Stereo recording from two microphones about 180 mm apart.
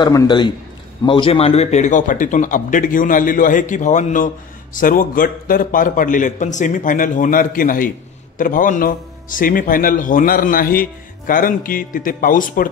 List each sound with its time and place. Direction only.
0.0 s a man's voice: 20° left (ahead or behind); by 12.6 s 50° left (ahead or behind)